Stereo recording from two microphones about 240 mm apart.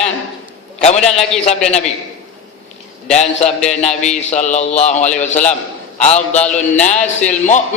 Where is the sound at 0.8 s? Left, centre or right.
Left.